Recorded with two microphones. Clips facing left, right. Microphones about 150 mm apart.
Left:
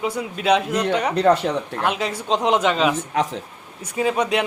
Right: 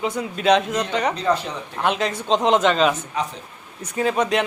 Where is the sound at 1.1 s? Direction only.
70° left (ahead or behind).